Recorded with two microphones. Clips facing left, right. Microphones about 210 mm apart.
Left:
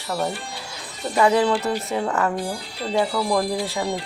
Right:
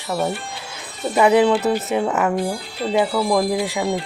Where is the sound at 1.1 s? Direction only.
20° right (ahead or behind).